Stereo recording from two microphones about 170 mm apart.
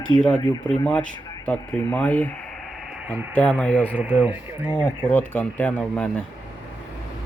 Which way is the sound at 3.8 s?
10° right (ahead or behind).